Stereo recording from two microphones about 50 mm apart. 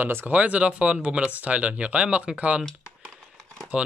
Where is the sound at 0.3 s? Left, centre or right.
Right.